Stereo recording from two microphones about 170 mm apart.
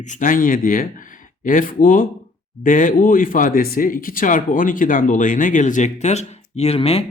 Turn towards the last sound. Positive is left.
turn(degrees=35)  # may be behind; listen again after turning